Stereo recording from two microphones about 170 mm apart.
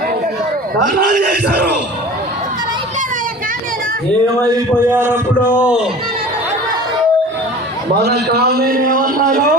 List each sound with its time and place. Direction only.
0.8 s a man's voice: 50° right (ahead or behind)
4.8 s a man's voice: 10° right (ahead or behind)
7.9 s a man's voice: 75° right (ahead or behind); by 9.6 s 50° right (ahead or behind)